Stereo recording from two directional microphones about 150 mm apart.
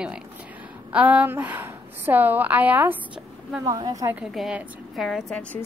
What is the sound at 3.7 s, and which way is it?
Speech, 25° right (ahead or behind).